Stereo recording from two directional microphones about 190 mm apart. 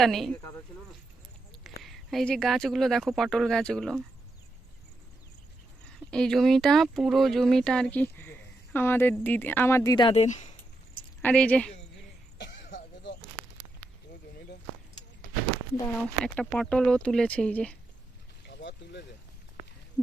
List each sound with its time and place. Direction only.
0.0 s speech: centre (ahead or behind)
1.6 s speech: centre (ahead or behind)
5.8 s speech: 5° left (ahead or behind); by 10.2 s 25° left (ahead or behind)
10.2 s speech: 40° left (ahead or behind)
11.2 s speech: 5° left (ahead or behind)
12.4 s a sound: 65° left (ahead or behind)
16.2 s speech: 5° left (ahead or behind)
18.4 s vehicle: 65° left (ahead or behind)